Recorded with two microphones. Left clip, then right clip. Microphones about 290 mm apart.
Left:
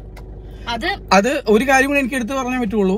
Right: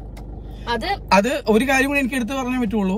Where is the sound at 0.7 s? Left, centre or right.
Centre.